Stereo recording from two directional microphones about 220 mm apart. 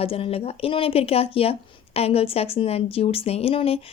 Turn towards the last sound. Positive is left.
turn(degrees=25)  # may be behind; listen again after turning